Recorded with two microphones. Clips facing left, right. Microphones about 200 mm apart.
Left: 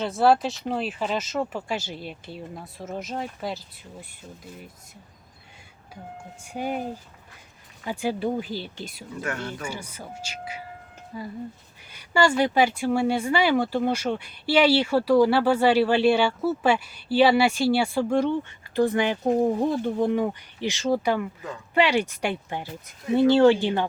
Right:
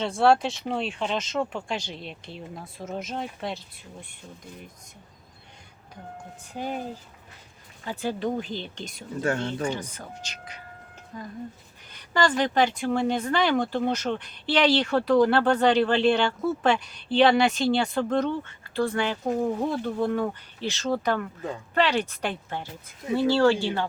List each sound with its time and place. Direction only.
0.0 s speech: centre (ahead or behind)
6.4 s speech: 10° left (ahead or behind)
7.9 s speech: 10° left (ahead or behind)
9.2 s speech: 30° right (ahead or behind)
9.6 s speech: 10° left (ahead or behind)